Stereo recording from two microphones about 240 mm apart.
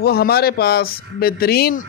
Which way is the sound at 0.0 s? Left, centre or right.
Left.